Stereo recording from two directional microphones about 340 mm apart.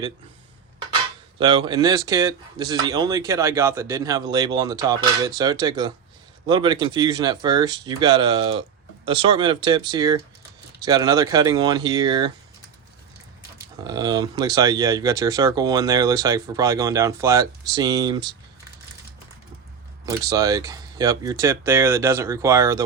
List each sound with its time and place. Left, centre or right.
1.4 s speech: centre
13.8 s speech: centre
20.1 s speech: centre